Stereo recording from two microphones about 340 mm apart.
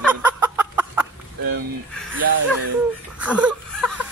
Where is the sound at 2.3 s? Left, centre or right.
Right.